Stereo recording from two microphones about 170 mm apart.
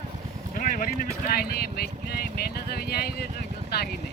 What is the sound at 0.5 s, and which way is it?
Speech, 55° left (ahead or behind).